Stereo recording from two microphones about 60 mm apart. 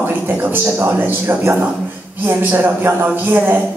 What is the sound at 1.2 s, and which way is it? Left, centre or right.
Speech, right.